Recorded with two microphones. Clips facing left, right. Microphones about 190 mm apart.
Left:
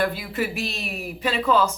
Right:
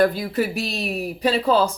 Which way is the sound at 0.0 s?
40° right (ahead or behind).